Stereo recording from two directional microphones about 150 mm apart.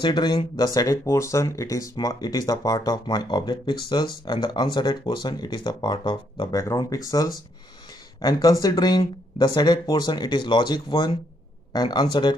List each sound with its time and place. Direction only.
0.0 s speech: 30° left (ahead or behind)
6.5 s speech: 20° left (ahead or behind)